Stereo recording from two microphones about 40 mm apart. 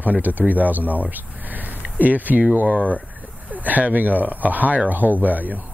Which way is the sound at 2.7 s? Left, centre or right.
Right.